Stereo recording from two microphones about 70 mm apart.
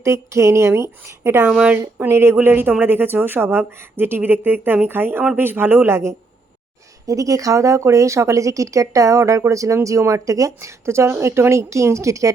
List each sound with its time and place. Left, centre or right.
0.0 s speech: right
0.8 s speech: right
1.5 s a woman's voice: centre
2.0 s speech: right
7.1 s speech: right